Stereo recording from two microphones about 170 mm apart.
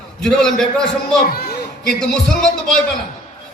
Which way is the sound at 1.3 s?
70° left (ahead or behind).